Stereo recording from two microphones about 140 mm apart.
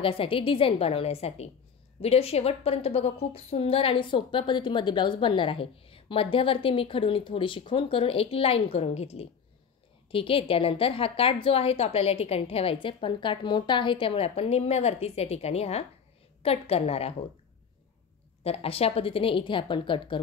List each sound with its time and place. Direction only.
0.0 s a woman's voice: 40° left (ahead or behind)
18.4 s a woman's voice: 45° left (ahead or behind)